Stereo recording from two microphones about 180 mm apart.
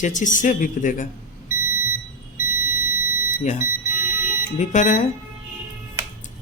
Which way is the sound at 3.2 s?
45° left (ahead or behind).